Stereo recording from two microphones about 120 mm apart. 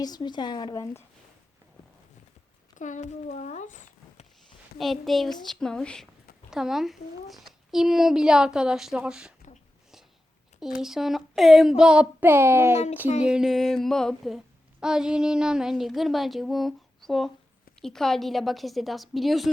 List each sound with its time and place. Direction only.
0.0 s speech: 35° left (ahead or behind)
2.7 s speech: 90° left
4.8 s speech: centre (ahead or behind)
10.6 s speech: 5° right (ahead or behind)
11.8 s child singing: 10° right (ahead or behind)
13.2 s speech: 5° right (ahead or behind)